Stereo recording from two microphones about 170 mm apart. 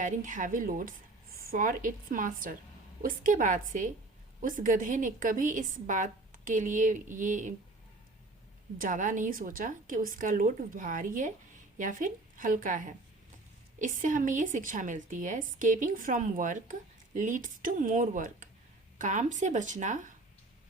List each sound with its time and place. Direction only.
0.0 s a woman's voice: 50° right (ahead or behind)
8.8 s a woman's voice: 50° right (ahead or behind)